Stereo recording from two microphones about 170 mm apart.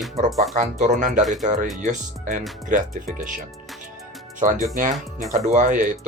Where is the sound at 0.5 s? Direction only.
45° right (ahead or behind).